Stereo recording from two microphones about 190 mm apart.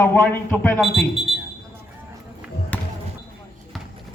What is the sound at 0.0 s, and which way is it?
Speech, 10° left (ahead or behind).